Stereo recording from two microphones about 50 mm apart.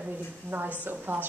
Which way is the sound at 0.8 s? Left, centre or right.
Right.